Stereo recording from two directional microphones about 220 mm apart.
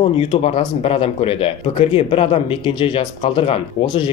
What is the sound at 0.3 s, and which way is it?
Speech, 25° left (ahead or behind).